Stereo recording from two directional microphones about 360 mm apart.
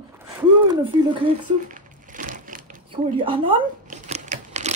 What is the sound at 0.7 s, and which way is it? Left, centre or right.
Crumpling, centre.